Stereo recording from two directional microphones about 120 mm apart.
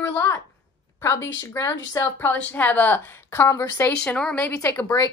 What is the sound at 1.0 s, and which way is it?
Speech, 25° left (ahead or behind).